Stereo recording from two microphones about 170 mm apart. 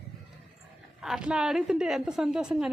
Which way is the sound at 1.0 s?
5° right (ahead or behind).